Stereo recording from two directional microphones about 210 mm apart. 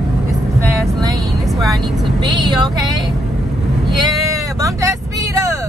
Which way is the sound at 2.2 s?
20° right (ahead or behind).